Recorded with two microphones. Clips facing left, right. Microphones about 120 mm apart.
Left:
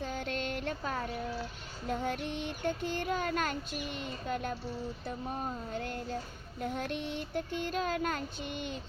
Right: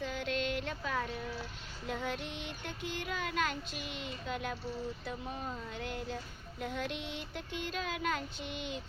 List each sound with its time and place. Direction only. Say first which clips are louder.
0.0 s music: even; 45° left (ahead or behind)
1.9 s child singing: left 4 dB; 45° left (ahead or behind)